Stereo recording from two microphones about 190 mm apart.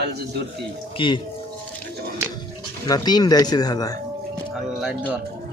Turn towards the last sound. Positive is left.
turn(degrees=-5)  # may be behind; listen again after turning